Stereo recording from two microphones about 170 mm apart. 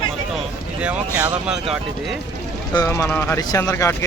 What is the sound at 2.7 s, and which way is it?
Speech, 20° left (ahead or behind).